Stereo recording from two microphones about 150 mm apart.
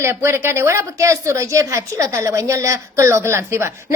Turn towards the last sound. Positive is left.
turn(degrees=-15)  # may be behind; listen again after turning